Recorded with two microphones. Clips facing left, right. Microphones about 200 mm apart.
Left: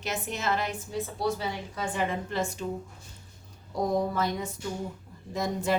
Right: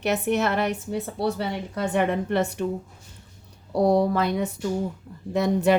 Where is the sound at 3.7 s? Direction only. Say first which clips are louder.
Right 7 dB; 70° right (ahead or behind).